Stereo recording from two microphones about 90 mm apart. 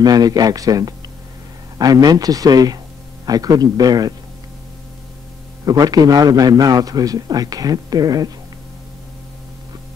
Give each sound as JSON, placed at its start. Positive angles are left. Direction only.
{"t": 0.0, "sound": "a man's voice", "side_deg": -45}
{"t": 5.7, "sound": "a man's voice", "side_deg": -45}